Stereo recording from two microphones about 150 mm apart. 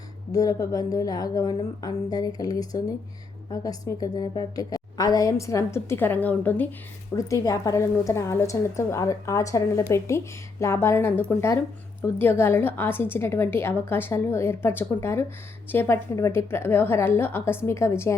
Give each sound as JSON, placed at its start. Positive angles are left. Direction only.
{"t": 0.3, "sound": "a woman's voice", "side_deg": 25}